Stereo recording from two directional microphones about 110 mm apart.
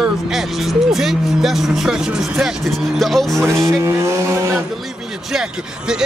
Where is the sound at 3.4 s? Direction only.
25° right (ahead or behind).